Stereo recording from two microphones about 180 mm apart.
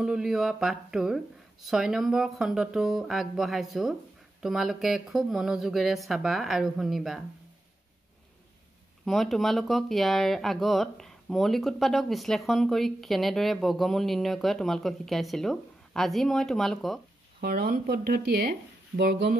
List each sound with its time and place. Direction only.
0.0 s speech: 5° right (ahead or behind)
9.0 s speech: centre (ahead or behind)
17.4 s speech: 55° right (ahead or behind)